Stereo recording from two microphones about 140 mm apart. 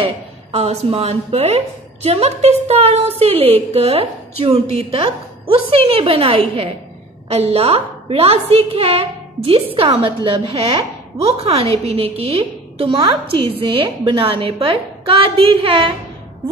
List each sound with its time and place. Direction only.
0.0 s a woman's voice: 45° right (ahead or behind)